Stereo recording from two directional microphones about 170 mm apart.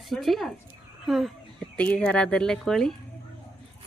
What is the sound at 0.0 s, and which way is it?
Speech, centre (ahead or behind).